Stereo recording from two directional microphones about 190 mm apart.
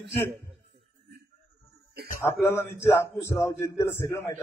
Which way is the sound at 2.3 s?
10° left (ahead or behind).